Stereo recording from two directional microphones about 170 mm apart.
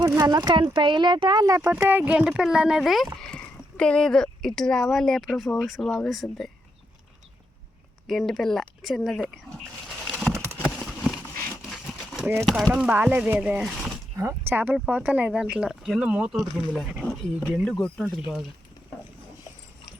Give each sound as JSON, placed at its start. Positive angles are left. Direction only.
{"t": 0.0, "sound": "speech", "side_deg": -20}
{"t": 1.7, "sound": "speech", "side_deg": -10}
{"t": 8.3, "sound": "speech", "side_deg": 0}
{"t": 10.5, "sound": "a sound", "side_deg": 10}
{"t": 12.5, "sound": "speech", "side_deg": 0}
{"t": 14.2, "sound": "speech", "side_deg": -15}